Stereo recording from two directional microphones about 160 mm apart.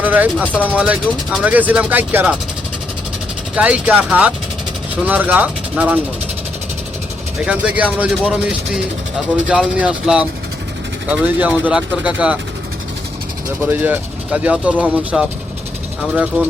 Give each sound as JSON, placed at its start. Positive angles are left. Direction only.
{"t": 0.0, "sound": "a sound", "side_deg": -10}
{"t": 0.3, "sound": "speech", "side_deg": 10}
{"t": 0.6, "sound": "speech", "side_deg": -10}
{"t": 1.0, "sound": "speech", "side_deg": 0}
{"t": 1.5, "sound": "speech", "side_deg": -10}
{"t": 3.5, "sound": "speech", "side_deg": -10}
{"t": 7.4, "sound": "speech", "side_deg": -10}
{"t": 13.7, "sound": "speech", "side_deg": -10}